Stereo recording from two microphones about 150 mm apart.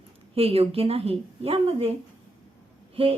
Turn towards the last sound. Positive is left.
turn(degrees=-40)  # may be behind; listen again after turning